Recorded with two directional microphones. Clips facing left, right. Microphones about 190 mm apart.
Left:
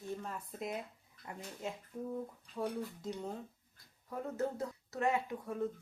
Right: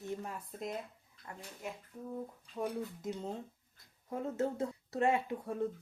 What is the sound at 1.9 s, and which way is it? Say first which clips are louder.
Speech: left 4 dB; 20° left (ahead or behind).